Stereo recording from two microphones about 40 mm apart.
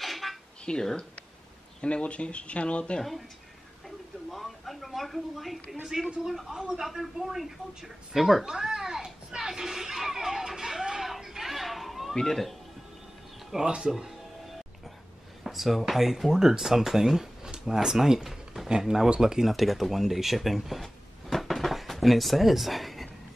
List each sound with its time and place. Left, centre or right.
0.0 s a sound: centre
0.7 s speech: centre
4.3 s speech: centre
6.2 s speech: centre
8.5 s children playing: centre
12.2 s speech: centre
13.5 s speech: centre
15.4 s a sound: centre
15.9 s speech: centre
19.5 s speech: centre